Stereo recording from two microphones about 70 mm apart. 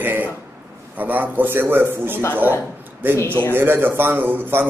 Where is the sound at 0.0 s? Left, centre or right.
Right.